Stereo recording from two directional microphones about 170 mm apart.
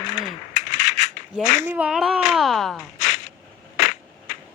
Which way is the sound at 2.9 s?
45° left (ahead or behind).